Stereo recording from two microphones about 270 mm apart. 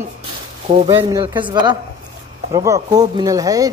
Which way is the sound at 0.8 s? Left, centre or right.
Centre.